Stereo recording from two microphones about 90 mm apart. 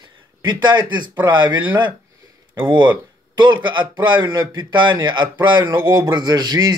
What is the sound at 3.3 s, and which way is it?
A man's voice, 55° right (ahead or behind).